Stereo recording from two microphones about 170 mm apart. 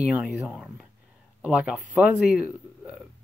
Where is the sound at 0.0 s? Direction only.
5° right (ahead or behind).